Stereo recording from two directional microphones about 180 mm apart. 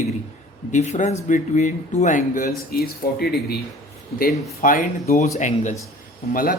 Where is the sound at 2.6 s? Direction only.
60° left (ahead or behind).